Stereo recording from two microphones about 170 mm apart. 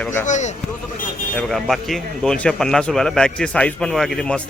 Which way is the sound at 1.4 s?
Centre (ahead or behind).